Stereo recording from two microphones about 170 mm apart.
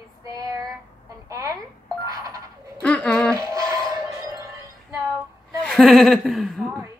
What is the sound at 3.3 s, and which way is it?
Music, 20° right (ahead or behind).